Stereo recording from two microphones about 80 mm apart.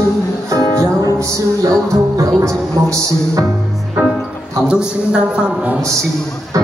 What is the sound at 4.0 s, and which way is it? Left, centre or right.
Music, centre.